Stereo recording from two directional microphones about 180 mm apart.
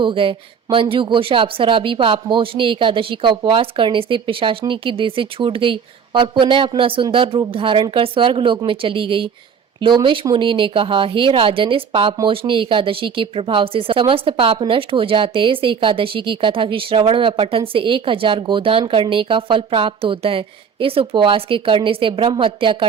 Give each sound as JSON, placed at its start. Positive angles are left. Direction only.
{"t": 0.0, "sound": "speech", "side_deg": -30}